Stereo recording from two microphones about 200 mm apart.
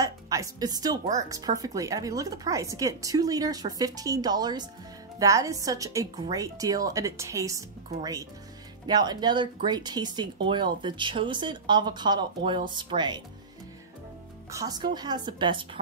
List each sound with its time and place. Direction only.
0.0 s a woman's voice: 15° right (ahead or behind)
14.5 s speech: 20° right (ahead or behind)